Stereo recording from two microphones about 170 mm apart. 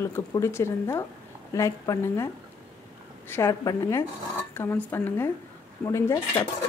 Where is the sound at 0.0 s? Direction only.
15° left (ahead or behind).